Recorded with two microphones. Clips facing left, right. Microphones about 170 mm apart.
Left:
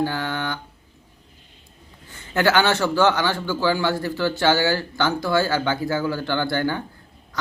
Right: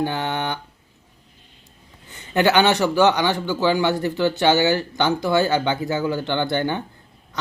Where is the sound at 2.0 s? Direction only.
20° right (ahead or behind).